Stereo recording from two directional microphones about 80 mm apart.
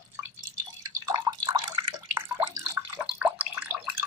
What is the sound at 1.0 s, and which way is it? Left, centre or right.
Drip, right.